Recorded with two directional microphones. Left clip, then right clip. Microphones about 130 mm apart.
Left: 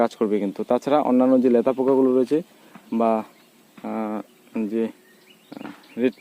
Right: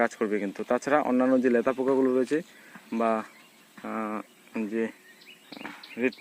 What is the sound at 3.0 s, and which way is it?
Speech, 15° left (ahead or behind).